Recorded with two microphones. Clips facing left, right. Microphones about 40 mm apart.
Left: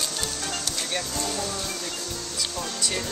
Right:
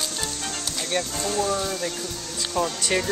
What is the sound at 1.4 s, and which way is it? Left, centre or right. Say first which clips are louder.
Speech: right 6 dB; right.